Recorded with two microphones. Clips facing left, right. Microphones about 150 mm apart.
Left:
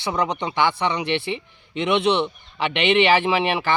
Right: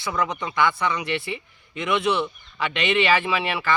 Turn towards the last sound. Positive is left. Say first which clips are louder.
# left 4 dB
turn(degrees=20)  # may be behind; listen again after turning